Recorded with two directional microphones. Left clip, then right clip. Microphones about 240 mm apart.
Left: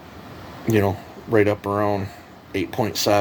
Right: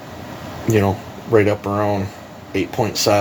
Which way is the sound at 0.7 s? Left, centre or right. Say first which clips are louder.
Right 3 dB; left.